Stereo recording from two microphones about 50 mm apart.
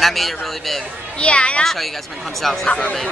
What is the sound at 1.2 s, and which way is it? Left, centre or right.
Speech, left.